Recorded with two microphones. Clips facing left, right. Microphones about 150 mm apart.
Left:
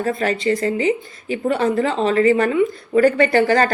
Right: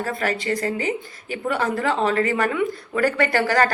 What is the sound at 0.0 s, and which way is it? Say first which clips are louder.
Speech: left 5 dB; 25° left (ahead or behind).